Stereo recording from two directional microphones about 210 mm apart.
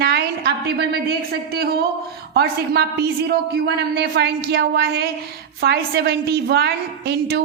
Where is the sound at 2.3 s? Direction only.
50° right (ahead or behind).